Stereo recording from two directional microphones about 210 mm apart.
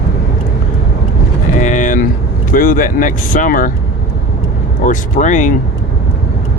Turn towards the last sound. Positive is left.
turn(degrees=35)  # may be behind; listen again after turning